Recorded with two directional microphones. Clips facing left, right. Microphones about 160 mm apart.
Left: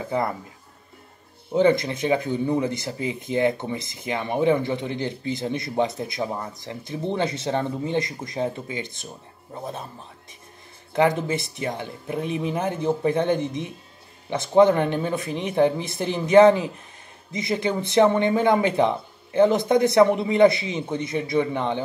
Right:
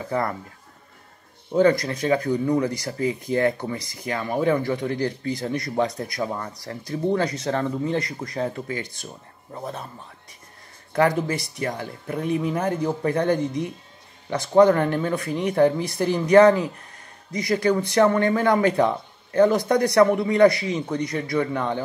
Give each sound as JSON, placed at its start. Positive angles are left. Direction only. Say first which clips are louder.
{"t": 0.0, "sound": "speech", "louder": "even", "side_deg": 20}
{"t": 1.5, "sound": "speech", "louder": "even", "side_deg": 25}
{"t": 10.9, "sound": "speech", "louder": "even", "side_deg": 20}